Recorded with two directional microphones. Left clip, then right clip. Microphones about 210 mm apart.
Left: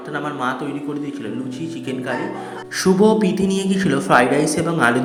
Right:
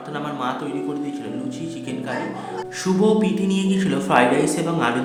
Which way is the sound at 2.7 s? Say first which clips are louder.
Left 4 dB; 20° left (ahead or behind).